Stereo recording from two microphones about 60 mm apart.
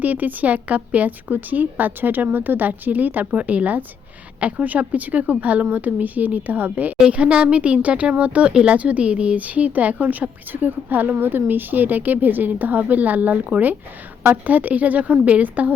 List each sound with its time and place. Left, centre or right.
0.0 s speech: right